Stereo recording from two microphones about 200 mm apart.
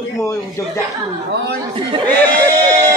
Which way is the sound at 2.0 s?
10° left (ahead or behind).